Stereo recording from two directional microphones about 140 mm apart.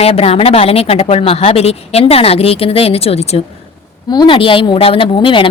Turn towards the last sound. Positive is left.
turn(degrees=40)  # may be behind; listen again after turning